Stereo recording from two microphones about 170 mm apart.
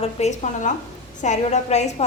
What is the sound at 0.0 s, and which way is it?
A woman's voice, 40° left (ahead or behind).